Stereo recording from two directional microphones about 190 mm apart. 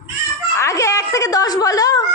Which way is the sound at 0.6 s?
15° left (ahead or behind).